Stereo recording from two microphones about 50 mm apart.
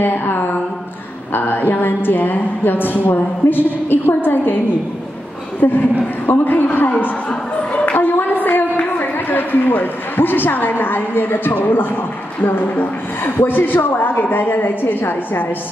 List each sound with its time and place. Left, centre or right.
0.0 s a sound: left
1.3 s a woman's voice: left
5.6 s a woman's voice: left
8.0 s a woman's voice: left